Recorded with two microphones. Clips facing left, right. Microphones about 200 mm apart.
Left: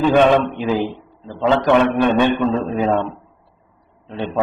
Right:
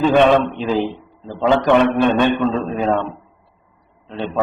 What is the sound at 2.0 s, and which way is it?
A man's voice, 15° left (ahead or behind).